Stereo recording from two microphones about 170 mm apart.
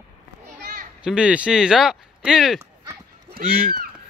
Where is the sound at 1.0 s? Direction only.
5° right (ahead or behind).